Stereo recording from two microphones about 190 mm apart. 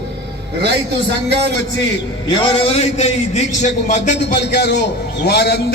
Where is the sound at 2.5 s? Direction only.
30° left (ahead or behind).